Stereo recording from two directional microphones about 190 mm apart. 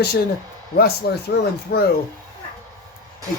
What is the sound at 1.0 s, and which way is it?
Speech, 55° left (ahead or behind).